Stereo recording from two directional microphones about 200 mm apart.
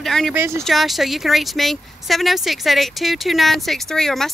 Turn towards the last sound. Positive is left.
turn(degrees=0)  # may be behind; listen again after turning